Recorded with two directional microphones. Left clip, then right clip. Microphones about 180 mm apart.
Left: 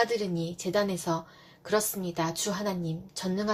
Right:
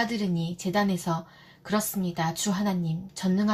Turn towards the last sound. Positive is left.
turn(degrees=40)  # may be behind; listen again after turning